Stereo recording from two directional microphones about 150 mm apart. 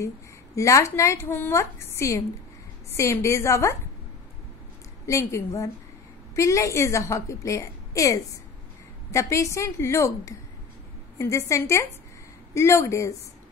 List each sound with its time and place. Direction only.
0.6 s a woman's voice: 20° left (ahead or behind)
5.0 s a woman's voice: 20° left (ahead or behind)